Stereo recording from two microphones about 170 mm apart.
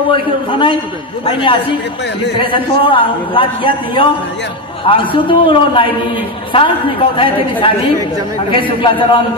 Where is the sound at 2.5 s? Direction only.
30° left (ahead or behind).